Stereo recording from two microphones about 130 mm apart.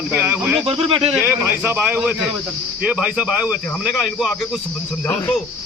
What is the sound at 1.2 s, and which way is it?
Speech, 15° right (ahead or behind).